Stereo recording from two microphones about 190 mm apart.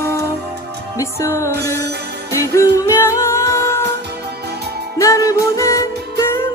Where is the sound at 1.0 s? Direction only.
15° left (ahead or behind).